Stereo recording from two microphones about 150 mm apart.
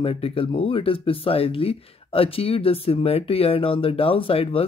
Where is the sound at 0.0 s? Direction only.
40° left (ahead or behind).